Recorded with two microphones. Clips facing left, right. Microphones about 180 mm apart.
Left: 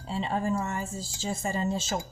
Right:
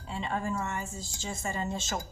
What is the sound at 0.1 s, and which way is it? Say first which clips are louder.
A woman's voice: left 4 dB; 35° left (ahead or behind).